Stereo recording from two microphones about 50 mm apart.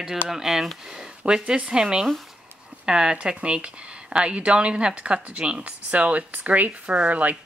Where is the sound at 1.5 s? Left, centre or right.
Centre.